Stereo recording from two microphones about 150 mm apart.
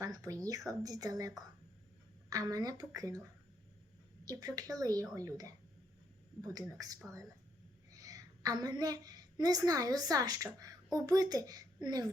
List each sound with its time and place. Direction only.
0.0 s speech: 25° right (ahead or behind)
2.3 s speech: 25° right (ahead or behind)
4.3 s a woman's voice: 25° right (ahead or behind)